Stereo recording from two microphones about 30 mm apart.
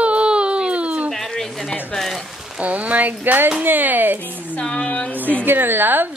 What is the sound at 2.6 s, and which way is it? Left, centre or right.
Speech, right.